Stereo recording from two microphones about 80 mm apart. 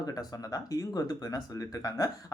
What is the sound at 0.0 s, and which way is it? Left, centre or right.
Speech, left.